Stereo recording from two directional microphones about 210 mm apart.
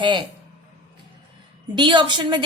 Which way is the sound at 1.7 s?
20° right (ahead or behind).